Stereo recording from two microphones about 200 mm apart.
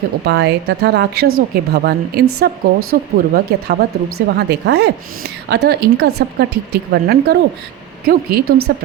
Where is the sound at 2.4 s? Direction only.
55° right (ahead or behind).